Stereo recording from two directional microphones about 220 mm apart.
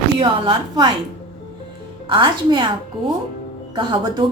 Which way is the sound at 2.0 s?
20° right (ahead or behind).